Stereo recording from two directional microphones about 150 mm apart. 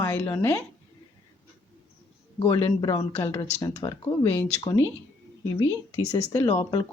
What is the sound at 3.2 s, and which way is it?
Speech, 15° left (ahead or behind).